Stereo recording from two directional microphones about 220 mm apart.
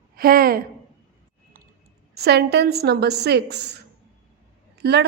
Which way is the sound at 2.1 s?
45° right (ahead or behind).